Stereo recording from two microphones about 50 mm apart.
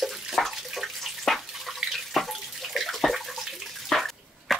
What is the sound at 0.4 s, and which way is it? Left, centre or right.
Water, centre.